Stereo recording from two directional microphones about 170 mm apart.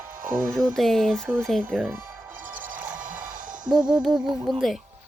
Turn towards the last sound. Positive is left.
turn(degrees=0)  # may be behind; listen again after turning